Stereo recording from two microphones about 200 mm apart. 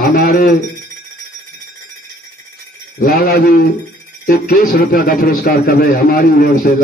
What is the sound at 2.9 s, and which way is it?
A man's voice, 50° left (ahead or behind).